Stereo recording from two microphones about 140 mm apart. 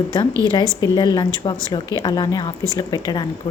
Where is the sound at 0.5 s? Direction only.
30° left (ahead or behind).